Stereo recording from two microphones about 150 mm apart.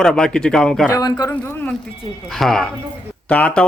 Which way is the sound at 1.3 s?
10° left (ahead or behind).